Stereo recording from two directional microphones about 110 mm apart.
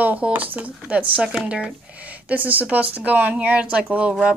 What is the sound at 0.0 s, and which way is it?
Speech, 15° right (ahead or behind).